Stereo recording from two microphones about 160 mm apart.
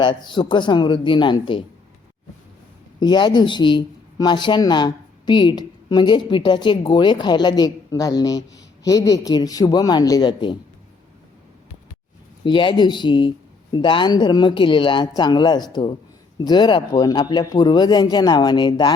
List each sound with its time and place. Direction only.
0.0 s speech: 30° left (ahead or behind)
3.0 s speech: 30° left (ahead or behind)
12.5 s speech: 30° left (ahead or behind)